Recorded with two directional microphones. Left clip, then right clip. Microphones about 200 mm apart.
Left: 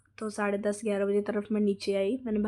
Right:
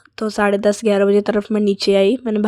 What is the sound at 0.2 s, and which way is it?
Speech, 45° right (ahead or behind).